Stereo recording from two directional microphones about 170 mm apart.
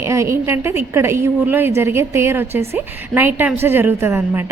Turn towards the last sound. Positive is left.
turn(degrees=-15)  # may be behind; listen again after turning